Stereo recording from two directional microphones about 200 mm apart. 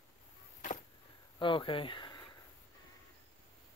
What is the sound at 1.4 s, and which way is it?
Speech, 25° left (ahead or behind).